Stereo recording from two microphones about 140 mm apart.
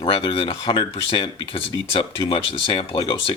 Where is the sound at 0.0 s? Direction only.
40° left (ahead or behind).